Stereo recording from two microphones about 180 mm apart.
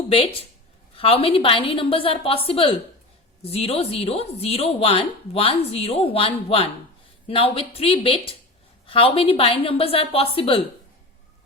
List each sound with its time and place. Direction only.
0.1 s a woman's voice: 30° left (ahead or behind)